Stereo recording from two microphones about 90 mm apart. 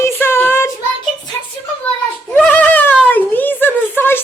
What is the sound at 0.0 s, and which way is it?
Child singing, 25° left (ahead or behind).